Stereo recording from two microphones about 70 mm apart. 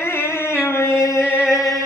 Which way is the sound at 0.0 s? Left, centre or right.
Left.